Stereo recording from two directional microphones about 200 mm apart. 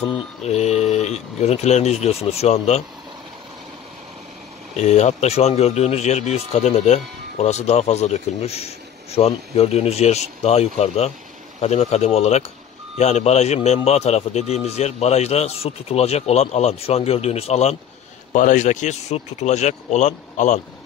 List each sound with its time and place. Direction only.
0.0 s speech: 30° left (ahead or behind)
4.7 s speech: 35° left (ahead or behind)